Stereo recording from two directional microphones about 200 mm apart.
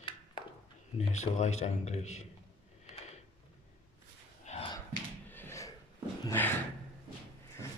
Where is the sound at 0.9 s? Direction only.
35° left (ahead or behind).